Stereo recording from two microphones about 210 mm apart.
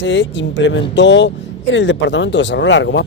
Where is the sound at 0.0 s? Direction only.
60° left (ahead or behind).